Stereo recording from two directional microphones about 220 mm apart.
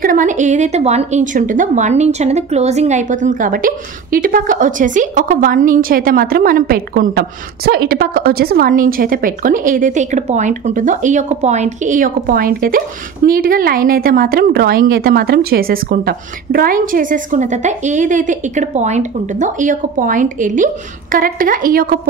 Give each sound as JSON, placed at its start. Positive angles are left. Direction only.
{"t": 0.0, "sound": "a woman's voice", "side_deg": -35}